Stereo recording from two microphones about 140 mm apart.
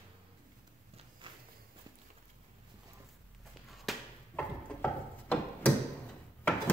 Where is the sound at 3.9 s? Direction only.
Centre (ahead or behind).